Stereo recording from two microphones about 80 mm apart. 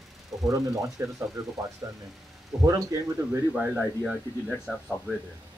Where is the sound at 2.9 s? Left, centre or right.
Right.